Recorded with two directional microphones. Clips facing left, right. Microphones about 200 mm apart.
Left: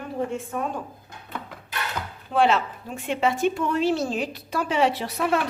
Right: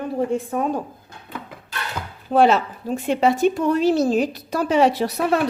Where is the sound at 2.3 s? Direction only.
40° right (ahead or behind).